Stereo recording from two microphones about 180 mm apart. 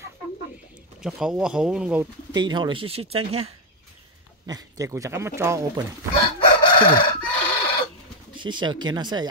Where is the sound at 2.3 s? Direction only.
25° right (ahead or behind).